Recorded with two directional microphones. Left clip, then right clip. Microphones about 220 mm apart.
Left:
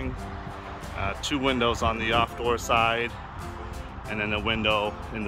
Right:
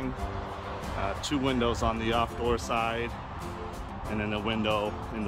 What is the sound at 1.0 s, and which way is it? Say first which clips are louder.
Speech: left 4 dB; 10° left (ahead or behind).